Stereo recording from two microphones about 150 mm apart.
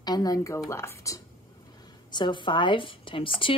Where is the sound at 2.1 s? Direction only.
30° left (ahead or behind).